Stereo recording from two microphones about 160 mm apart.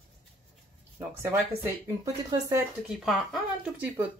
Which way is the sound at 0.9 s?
15° right (ahead or behind).